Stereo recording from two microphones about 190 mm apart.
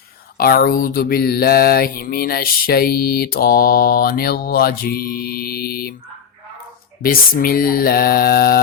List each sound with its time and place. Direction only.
0.3 s mantra: 50° left (ahead or behind)
7.0 s mantra: 50° left (ahead or behind)